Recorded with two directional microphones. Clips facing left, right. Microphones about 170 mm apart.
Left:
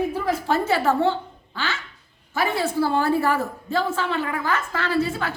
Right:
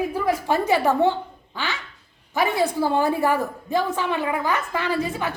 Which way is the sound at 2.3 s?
15° right (ahead or behind).